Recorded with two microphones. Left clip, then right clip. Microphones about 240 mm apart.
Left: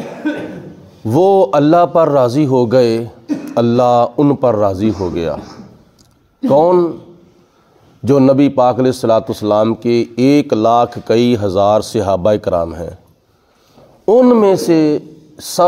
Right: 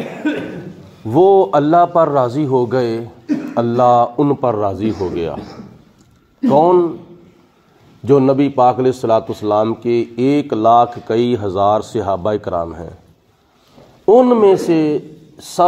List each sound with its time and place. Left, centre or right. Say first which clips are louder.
1.0 s a man's voice: even; left
6.4 s a man's voice: left 1 dB; left
8.0 s a man's voice: left 2 dB; left
14.0 s a man's voice: even; left